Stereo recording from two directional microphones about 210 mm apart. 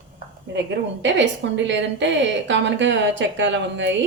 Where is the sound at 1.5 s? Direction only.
60° right (ahead or behind).